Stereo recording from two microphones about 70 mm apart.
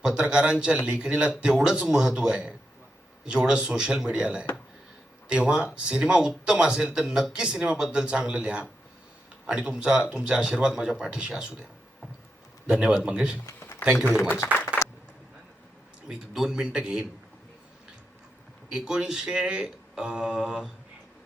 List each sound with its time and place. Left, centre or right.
0.0 s speech: centre
12.6 s speech: centre
13.4 s a sound: left
14.4 s speech: left
16.0 s speech: centre
18.7 s speech: centre